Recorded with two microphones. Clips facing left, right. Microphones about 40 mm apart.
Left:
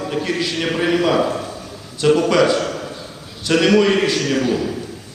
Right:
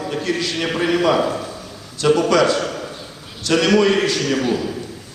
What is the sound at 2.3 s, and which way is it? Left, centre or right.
A man's voice, centre.